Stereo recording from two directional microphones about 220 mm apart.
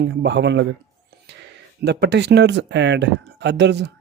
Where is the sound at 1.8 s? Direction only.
50° right (ahead or behind).